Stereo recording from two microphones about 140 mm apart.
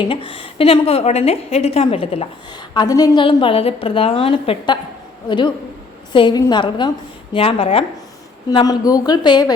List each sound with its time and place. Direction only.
0.0 s a woman's voice: 35° left (ahead or behind)
2.7 s speech: 25° left (ahead or behind)
3.2 s a woman's voice: 40° left (ahead or behind)
8.4 s speech: 25° left (ahead or behind)